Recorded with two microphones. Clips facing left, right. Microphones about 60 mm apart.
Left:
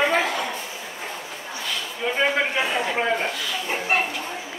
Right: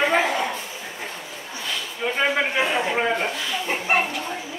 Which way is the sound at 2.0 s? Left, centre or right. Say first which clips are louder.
Even; centre.